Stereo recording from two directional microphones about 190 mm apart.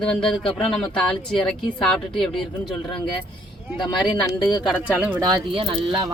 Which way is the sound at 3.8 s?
20° left (ahead or behind).